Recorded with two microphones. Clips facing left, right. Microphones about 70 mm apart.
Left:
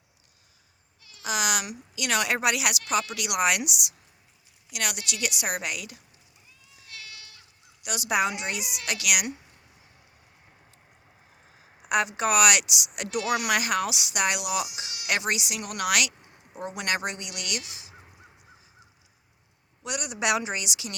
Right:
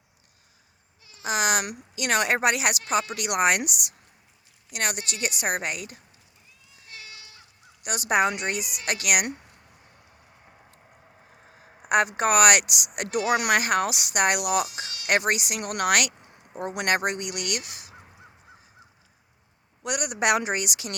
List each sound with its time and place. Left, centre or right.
1.2 s a woman's voice: right
6.8 s goat: right
7.8 s speech: right
11.5 s speech: right
19.8 s speech: right